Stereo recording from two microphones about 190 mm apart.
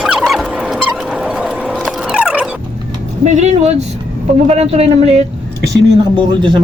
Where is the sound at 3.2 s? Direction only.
35° right (ahead or behind).